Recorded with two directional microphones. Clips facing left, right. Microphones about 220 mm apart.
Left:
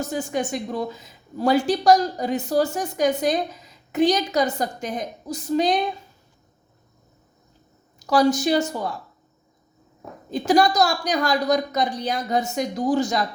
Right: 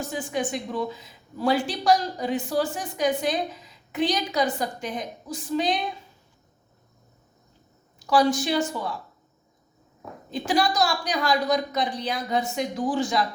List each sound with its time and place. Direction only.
0.0 s a woman's voice: 40° left (ahead or behind)
7.9 s speech: 40° left (ahead or behind)
10.3 s a woman's voice: 45° left (ahead or behind)